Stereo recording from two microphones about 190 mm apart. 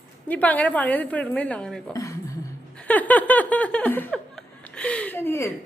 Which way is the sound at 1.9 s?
15° left (ahead or behind).